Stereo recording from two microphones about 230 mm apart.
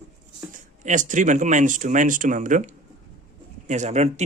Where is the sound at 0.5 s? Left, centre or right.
Right.